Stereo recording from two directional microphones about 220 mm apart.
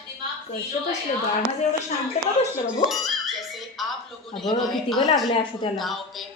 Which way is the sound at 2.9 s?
Centre (ahead or behind).